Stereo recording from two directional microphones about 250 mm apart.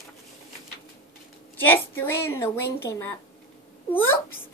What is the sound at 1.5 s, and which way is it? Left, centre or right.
A child's voice, centre.